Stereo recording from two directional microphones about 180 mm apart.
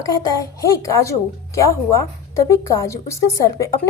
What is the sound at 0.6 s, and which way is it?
A woman's voice, 15° left (ahead or behind).